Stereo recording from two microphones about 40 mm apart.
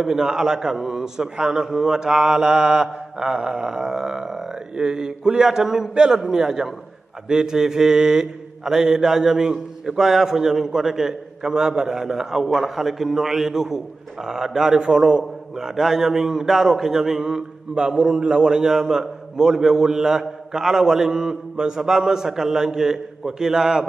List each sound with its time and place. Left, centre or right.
0.0 s a man's voice: centre